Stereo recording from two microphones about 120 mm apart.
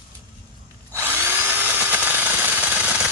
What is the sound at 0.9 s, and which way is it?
Drill, 20° right (ahead or behind).